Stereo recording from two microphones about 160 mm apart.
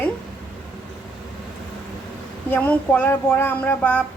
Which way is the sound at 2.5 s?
10° left (ahead or behind).